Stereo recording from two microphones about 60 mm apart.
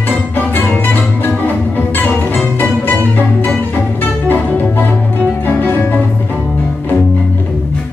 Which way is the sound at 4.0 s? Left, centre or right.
Left.